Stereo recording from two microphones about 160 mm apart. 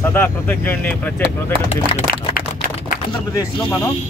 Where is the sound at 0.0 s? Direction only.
15° left (ahead or behind).